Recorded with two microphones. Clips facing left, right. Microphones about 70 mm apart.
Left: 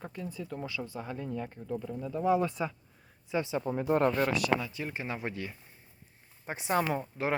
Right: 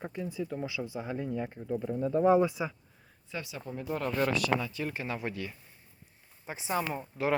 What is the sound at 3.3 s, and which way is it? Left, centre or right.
Speech, left.